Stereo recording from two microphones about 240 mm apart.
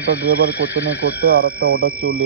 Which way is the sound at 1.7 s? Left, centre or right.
Right.